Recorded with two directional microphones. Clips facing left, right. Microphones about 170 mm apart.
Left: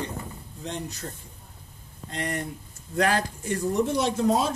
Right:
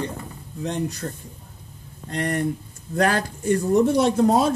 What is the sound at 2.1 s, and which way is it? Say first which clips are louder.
Speech: right 7 dB; 50° right (ahead or behind).